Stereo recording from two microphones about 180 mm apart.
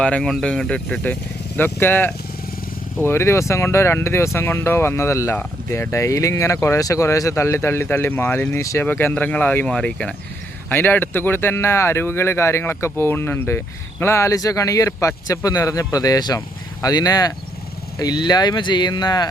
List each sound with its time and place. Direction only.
0.0 s speech: 5° left (ahead or behind); by 19.3 s 25° left (ahead or behind)